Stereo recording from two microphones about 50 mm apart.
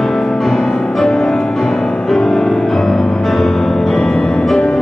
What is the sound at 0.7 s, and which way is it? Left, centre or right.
Music, centre.